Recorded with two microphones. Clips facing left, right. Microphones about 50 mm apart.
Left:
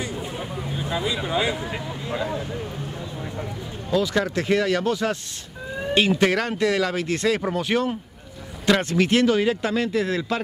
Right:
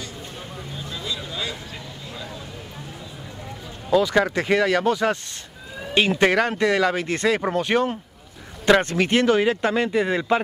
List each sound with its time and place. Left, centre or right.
0.0 s speech: left
4.1 s speech: centre